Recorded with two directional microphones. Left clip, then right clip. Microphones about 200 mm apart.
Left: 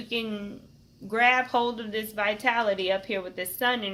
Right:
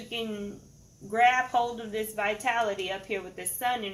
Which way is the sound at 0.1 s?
50° left (ahead or behind).